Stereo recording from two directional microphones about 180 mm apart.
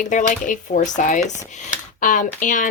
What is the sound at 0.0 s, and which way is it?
Speech, 45° left (ahead or behind).